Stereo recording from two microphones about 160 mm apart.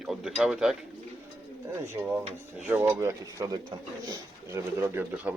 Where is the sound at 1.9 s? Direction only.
10° right (ahead or behind).